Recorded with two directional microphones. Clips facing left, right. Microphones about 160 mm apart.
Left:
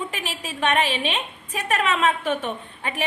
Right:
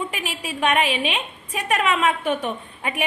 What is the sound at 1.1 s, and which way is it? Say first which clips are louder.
A woman's voice: right 1 dB; 35° left (ahead or behind).